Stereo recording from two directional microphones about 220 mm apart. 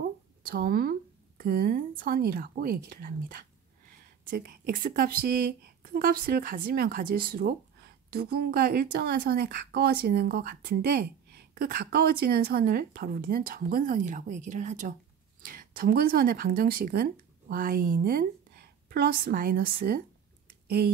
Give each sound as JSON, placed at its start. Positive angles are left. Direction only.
{"t": 0.5, "sound": "a woman's voice", "side_deg": -45}